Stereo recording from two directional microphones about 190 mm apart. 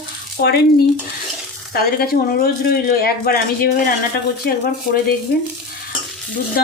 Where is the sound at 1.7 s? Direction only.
50° left (ahead or behind).